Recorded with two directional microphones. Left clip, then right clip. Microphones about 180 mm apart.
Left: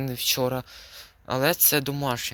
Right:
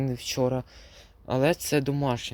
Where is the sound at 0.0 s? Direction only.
20° right (ahead or behind).